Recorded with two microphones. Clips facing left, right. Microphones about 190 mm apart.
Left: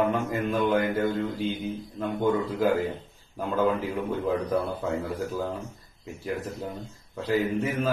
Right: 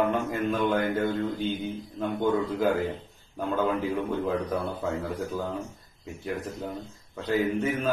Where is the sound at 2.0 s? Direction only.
Centre (ahead or behind).